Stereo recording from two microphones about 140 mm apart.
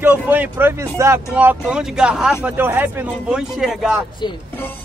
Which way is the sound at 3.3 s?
5° right (ahead or behind).